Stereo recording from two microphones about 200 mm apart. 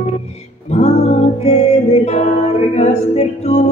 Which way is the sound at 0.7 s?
35° left (ahead or behind).